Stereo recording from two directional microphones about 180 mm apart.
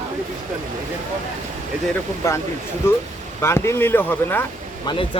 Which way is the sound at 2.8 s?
15° left (ahead or behind).